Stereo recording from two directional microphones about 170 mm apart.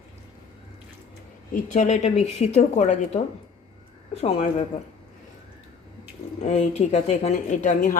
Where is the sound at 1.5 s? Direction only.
45° left (ahead or behind).